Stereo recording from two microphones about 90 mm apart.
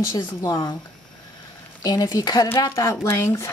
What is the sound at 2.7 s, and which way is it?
Speech, 35° left (ahead or behind).